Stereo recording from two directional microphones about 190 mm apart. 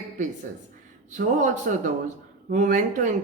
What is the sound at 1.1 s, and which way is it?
Speech, 40° right (ahead or behind).